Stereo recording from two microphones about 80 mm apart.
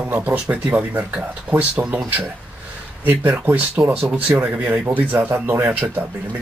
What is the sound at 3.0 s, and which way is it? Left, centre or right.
Speech, right.